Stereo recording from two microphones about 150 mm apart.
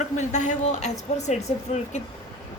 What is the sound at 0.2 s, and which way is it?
A woman's voice, 50° left (ahead or behind).